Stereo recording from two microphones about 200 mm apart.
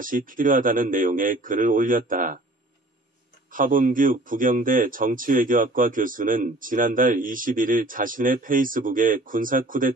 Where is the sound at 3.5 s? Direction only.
45° right (ahead or behind).